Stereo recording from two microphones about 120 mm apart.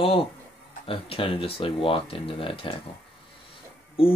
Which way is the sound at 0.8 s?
50° left (ahead or behind).